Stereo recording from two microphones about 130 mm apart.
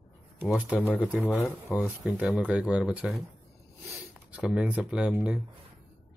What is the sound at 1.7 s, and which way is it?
Speech, 10° right (ahead or behind).